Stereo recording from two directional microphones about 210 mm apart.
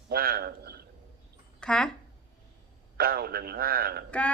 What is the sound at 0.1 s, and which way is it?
Speech, 45° right (ahead or behind).